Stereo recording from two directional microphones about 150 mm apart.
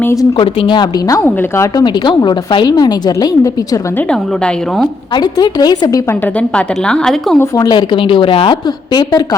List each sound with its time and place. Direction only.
0.0 s speech: 20° left (ahead or behind)
0.3 s a woman's voice: 35° left (ahead or behind)
3.9 s a woman's voice: 5° left (ahead or behind)
5.1 s a woman's voice: 30° left (ahead or behind)
6.2 s a woman's voice: 5° left (ahead or behind)
7.3 s a woman's voice: 25° left (ahead or behind)